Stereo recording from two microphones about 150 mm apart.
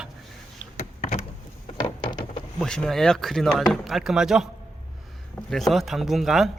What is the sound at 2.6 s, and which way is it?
A man's voice, 5° left (ahead or behind).